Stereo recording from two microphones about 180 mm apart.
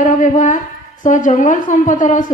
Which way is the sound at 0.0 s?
45° left (ahead or behind).